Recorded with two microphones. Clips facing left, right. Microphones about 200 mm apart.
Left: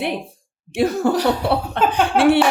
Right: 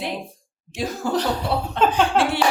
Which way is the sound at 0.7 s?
65° left (ahead or behind).